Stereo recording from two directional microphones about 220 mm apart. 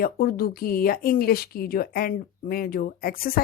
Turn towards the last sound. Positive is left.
turn(degrees=40)  # may be behind; listen again after turning